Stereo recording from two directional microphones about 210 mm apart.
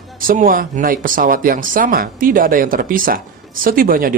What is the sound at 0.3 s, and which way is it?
Speech, 40° right (ahead or behind).